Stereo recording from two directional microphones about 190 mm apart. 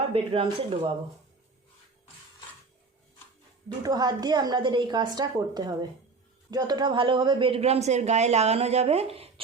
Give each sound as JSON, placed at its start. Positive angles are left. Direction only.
{"t": 0.0, "sound": "a woman's voice", "side_deg": -30}
{"t": 3.7, "sound": "a woman's voice", "side_deg": -20}